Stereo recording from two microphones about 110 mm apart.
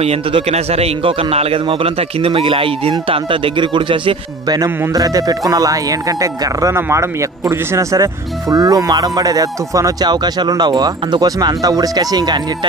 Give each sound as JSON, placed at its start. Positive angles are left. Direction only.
{"t": 0.0, "sound": "a man's voice", "side_deg": -75}
{"t": 4.6, "sound": "speech", "side_deg": -30}